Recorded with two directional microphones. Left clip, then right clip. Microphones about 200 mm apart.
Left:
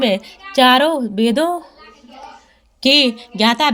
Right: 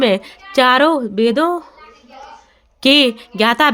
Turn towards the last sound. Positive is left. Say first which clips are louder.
# right 2 dB
turn(degrees=-35)  # may be behind; listen again after turning